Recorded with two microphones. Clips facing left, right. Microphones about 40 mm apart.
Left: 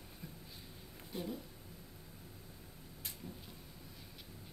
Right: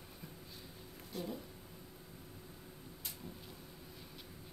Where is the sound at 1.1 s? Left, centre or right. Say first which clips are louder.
Even; left.